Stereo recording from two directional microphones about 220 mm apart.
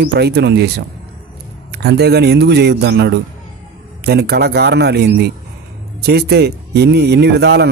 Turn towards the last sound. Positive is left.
turn(degrees=-45)  # may be behind; listen again after turning